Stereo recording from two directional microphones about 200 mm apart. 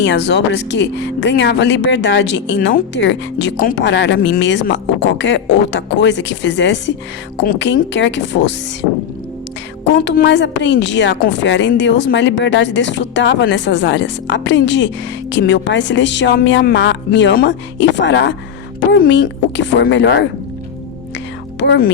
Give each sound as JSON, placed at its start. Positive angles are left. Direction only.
{"t": 0.0, "sound": "a woman's voice", "side_deg": 60}
{"t": 9.8, "sound": "a woman's voice", "side_deg": 60}
{"t": 21.6, "sound": "a woman's voice", "side_deg": 60}